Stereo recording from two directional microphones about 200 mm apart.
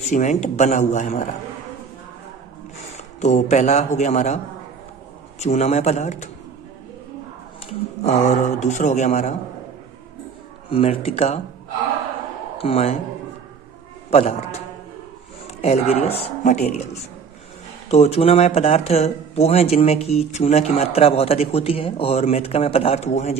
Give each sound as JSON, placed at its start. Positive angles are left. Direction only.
{"t": 0.1, "sound": "speech", "side_deg": 35}
{"t": 3.2, "sound": "speech", "side_deg": 35}
{"t": 5.4, "sound": "speech", "side_deg": 35}
{"t": 8.0, "sound": "speech", "side_deg": 35}
{"t": 10.7, "sound": "speech", "side_deg": 30}
{"t": 12.5, "sound": "speech", "side_deg": 30}
{"t": 14.1, "sound": "speech", "side_deg": 30}